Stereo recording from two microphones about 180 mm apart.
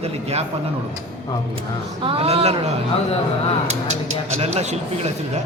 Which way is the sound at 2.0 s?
30° right (ahead or behind).